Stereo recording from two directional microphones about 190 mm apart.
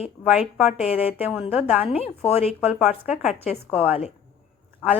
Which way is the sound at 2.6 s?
5° right (ahead or behind).